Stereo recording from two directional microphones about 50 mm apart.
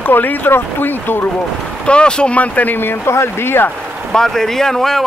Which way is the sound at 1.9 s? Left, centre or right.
Centre.